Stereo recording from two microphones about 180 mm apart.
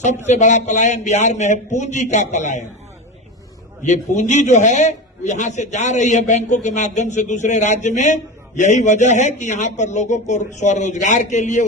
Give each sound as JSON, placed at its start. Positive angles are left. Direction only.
{"t": 0.3, "sound": "a man's voice", "side_deg": 40}
{"t": 3.8, "sound": "a man's voice", "side_deg": 40}